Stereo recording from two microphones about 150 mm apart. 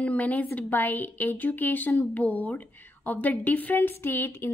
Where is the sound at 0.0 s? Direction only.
10° left (ahead or behind).